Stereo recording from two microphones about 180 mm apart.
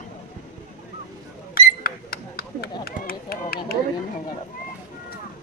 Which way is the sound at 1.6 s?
55° left (ahead or behind).